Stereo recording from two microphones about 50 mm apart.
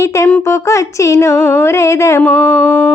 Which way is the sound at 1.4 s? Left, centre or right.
Left.